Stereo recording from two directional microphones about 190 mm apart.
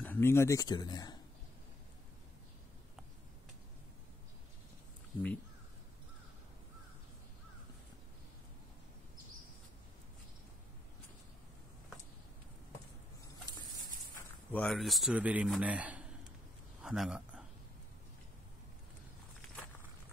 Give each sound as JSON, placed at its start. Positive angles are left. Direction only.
{"t": 0.0, "sound": "speech", "side_deg": 10}
{"t": 14.5, "sound": "a man's voice", "side_deg": 5}
{"t": 16.8, "sound": "a sound", "side_deg": -5}